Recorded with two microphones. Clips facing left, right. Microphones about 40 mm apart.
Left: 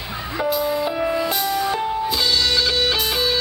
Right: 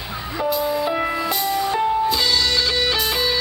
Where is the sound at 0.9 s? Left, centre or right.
Centre.